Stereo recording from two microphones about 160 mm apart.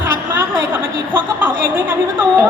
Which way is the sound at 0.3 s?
15° right (ahead or behind).